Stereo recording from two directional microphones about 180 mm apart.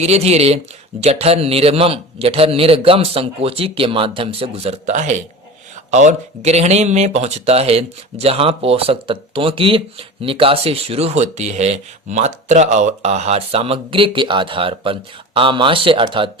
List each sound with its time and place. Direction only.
0.0 s speech: 35° right (ahead or behind)